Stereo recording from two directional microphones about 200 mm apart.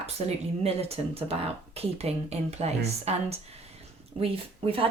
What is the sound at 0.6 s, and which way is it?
Speech, 30° right (ahead or behind).